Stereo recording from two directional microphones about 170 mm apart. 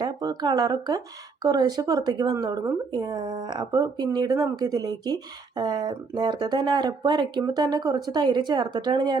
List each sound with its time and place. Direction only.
0.0 s speech: 25° right (ahead or behind)